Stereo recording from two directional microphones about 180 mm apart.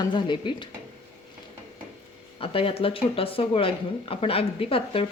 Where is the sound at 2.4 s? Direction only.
30° left (ahead or behind).